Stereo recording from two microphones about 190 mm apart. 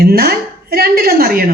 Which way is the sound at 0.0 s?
50° right (ahead or behind).